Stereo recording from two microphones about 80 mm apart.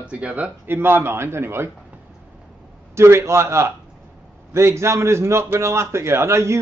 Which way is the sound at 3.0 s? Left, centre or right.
Right.